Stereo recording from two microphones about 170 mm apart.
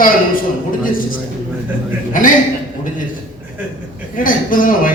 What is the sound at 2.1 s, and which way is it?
Speech, 50° left (ahead or behind).